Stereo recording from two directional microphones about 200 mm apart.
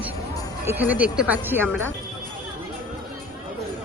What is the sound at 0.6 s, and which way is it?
Speech, 10° right (ahead or behind).